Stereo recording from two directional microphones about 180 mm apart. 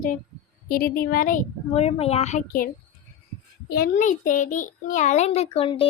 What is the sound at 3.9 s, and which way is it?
Child singing, 45° left (ahead or behind).